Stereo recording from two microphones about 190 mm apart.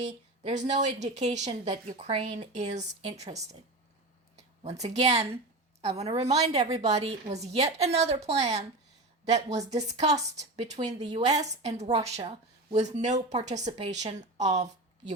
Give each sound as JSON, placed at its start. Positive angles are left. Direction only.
{"t": 0.0, "sound": "speech", "side_deg": -40}